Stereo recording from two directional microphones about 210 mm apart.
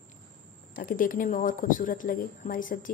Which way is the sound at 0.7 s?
40° left (ahead or behind).